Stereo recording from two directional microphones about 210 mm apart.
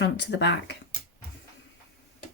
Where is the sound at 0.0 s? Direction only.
55° left (ahead or behind).